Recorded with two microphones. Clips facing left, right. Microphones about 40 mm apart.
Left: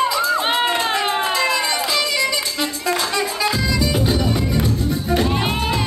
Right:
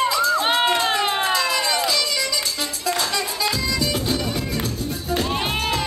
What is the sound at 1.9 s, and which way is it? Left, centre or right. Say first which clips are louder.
Music: left 4 dB; left.